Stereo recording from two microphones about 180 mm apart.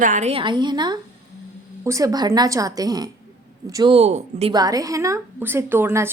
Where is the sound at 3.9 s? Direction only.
35° right (ahead or behind).